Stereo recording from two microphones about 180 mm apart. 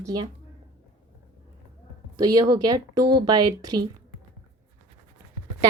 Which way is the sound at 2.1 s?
20° right (ahead or behind).